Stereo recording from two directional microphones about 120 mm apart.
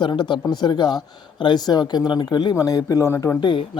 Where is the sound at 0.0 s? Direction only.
40° left (ahead or behind); by 3.3 s 20° left (ahead or behind).